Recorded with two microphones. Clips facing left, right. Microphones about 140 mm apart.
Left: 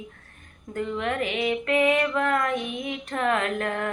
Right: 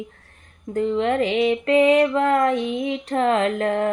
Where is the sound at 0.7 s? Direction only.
30° right (ahead or behind).